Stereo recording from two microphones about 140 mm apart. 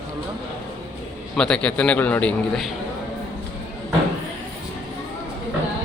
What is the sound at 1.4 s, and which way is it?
A man's voice, 5° left (ahead or behind).